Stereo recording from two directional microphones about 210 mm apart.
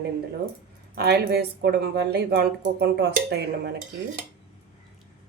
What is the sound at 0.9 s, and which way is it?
Speech, 50° right (ahead or behind).